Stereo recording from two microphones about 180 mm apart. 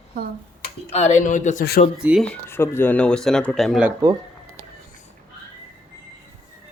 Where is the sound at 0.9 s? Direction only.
40° left (ahead or behind).